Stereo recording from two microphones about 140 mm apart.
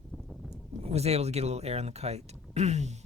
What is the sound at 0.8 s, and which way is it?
Speech, 50° right (ahead or behind).